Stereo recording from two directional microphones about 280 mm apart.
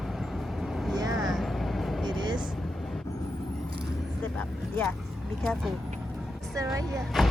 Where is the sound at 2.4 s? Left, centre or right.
Centre.